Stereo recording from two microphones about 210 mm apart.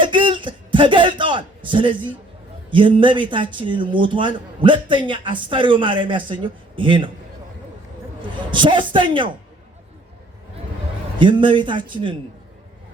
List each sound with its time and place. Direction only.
0.0 s a sound: 25° right (ahead or behind)
2.6 s speech: 25° right (ahead or behind)
8.4 s speech: 25° right (ahead or behind)
11.2 s speech: 25° right (ahead or behind)